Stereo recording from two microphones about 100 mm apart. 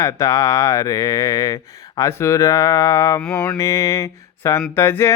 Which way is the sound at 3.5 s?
35° left (ahead or behind).